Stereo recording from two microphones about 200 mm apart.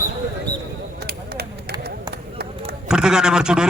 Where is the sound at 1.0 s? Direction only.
50° right (ahead or behind).